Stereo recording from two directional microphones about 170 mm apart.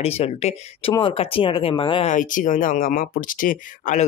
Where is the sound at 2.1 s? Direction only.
50° left (ahead or behind).